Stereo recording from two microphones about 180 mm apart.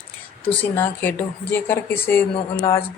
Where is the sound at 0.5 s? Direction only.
10° left (ahead or behind).